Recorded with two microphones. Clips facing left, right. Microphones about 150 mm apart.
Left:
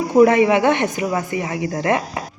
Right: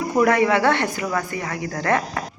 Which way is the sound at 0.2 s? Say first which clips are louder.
Left 5 dB; 20° left (ahead or behind).